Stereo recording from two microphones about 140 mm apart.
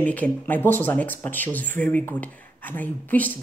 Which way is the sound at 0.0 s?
10° left (ahead or behind).